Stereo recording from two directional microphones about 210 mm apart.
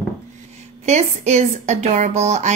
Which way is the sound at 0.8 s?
30° right (ahead or behind).